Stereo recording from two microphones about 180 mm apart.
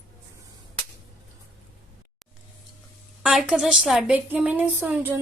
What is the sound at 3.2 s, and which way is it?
A woman's voice, 5° right (ahead or behind).